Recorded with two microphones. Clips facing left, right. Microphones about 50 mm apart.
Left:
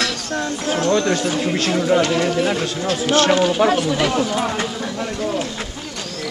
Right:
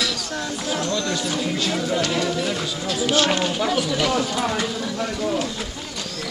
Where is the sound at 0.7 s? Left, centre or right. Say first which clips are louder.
Left 8 dB; left.